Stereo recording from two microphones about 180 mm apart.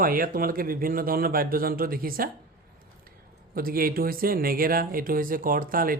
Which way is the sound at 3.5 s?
55° right (ahead or behind).